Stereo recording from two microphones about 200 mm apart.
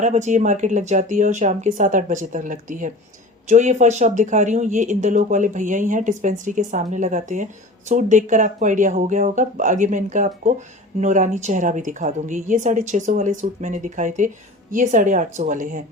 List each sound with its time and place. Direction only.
0.0 s speech: 35° right (ahead or behind)